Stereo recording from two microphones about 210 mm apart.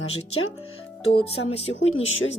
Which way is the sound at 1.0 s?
25° left (ahead or behind).